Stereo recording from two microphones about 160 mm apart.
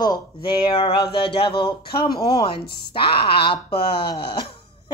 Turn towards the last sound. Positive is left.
turn(degrees=35)  # may be behind; listen again after turning